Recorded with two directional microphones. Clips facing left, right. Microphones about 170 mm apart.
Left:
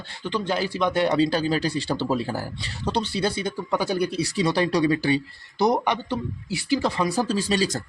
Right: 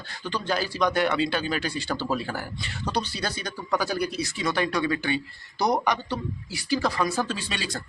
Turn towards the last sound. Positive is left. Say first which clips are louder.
# left 8 dB
turn(degrees=40)  # may be behind; listen again after turning